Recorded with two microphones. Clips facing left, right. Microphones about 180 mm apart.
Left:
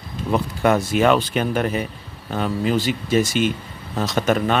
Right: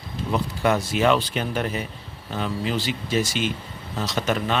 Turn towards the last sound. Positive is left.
turn(degrees=50)  # may be behind; listen again after turning